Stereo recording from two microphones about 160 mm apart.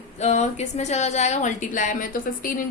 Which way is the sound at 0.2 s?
45° left (ahead or behind).